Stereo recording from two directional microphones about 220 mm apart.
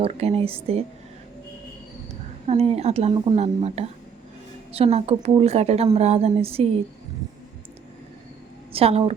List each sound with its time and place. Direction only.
0.0 s a woman's voice: 25° right (ahead or behind)
2.5 s a woman's voice: 25° right (ahead or behind)
8.7 s a woman's voice: 25° right (ahead or behind)